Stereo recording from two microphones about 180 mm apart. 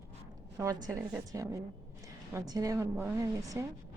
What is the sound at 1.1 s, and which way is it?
A woman's voice, 15° right (ahead or behind).